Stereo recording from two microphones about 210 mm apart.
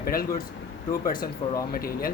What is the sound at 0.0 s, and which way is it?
Speech, 45° left (ahead or behind).